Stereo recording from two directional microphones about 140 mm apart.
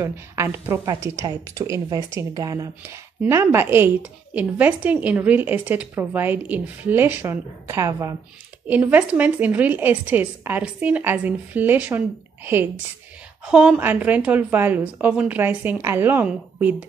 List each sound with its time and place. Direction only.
0.0 s a woman's voice: 15° right (ahead or behind)
13.5 s a woman's voice: 5° right (ahead or behind)